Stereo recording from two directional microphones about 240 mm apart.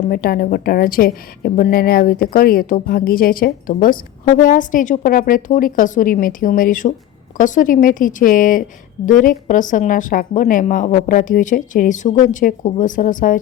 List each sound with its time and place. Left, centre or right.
0.1 s a woman's voice: left